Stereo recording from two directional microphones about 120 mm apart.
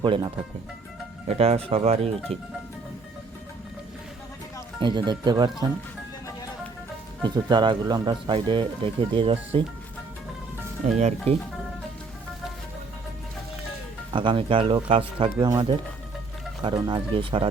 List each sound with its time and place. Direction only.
0.0 s speech: 45° right (ahead or behind)
1.3 s speech: 60° right (ahead or behind)
4.8 s speech: 40° right (ahead or behind)
7.3 s speech: 40° right (ahead or behind)
10.9 s speech: 75° right (ahead or behind)
14.1 s speech: 45° right (ahead or behind)
15.4 s speech: 35° right (ahead or behind)
16.9 s speech: 45° right (ahead or behind)